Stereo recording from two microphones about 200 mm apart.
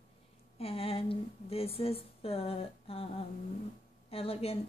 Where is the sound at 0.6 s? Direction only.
30° left (ahead or behind).